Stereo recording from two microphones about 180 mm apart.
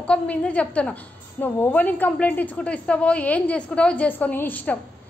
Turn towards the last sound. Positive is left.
turn(degrees=10)  # may be behind; listen again after turning